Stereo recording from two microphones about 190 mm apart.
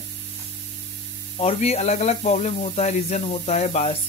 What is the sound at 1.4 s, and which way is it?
Speech, 35° left (ahead or behind).